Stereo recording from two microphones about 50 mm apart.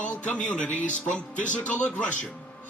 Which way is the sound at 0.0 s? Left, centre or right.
Left.